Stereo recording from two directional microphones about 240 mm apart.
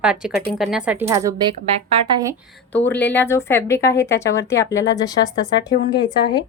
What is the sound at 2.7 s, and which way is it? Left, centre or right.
Speech, centre.